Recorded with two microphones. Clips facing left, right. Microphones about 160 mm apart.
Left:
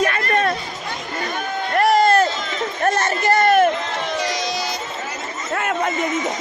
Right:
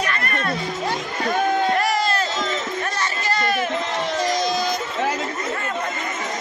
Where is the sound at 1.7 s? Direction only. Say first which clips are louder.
Left 6 dB; 55° left (ahead or behind).